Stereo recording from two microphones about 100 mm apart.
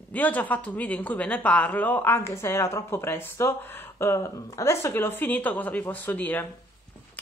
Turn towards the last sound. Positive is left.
turn(degrees=20)  # may be behind; listen again after turning